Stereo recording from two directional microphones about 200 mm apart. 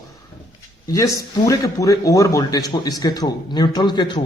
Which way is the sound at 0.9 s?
15° left (ahead or behind).